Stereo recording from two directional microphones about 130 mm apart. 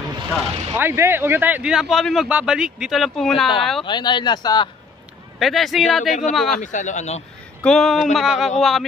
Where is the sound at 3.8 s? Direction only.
35° left (ahead or behind).